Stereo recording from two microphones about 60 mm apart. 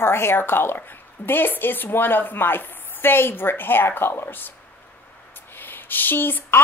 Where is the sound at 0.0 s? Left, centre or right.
Left.